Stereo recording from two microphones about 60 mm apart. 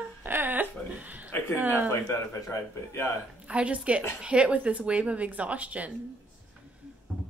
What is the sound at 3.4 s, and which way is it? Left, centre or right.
A woman's voice, right.